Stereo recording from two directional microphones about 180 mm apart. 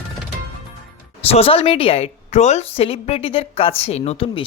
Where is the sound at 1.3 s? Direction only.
30° left (ahead or behind).